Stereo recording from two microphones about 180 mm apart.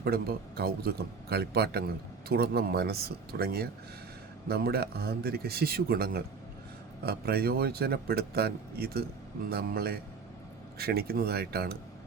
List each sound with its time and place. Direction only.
0.0 s a man's voice: 60° right (ahead or behind)